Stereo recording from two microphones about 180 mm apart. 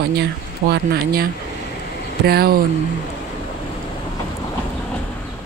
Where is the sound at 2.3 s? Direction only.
60° right (ahead or behind).